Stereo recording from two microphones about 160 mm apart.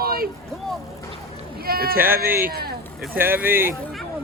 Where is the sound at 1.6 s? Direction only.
70° right (ahead or behind).